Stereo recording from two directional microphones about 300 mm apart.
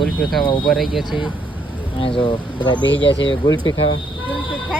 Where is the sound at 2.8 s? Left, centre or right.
Left.